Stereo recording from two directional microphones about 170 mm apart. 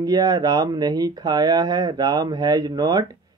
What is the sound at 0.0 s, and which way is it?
Speech, 20° right (ahead or behind).